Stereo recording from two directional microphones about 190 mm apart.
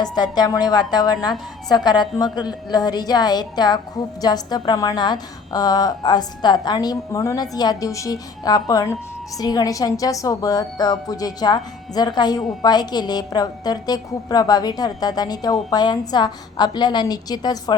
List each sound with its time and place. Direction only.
0.0 s speech: 20° left (ahead or behind)